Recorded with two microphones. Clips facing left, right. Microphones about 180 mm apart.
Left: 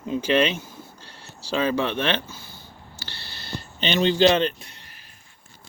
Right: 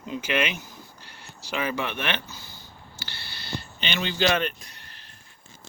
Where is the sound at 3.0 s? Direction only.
35° left (ahead or behind).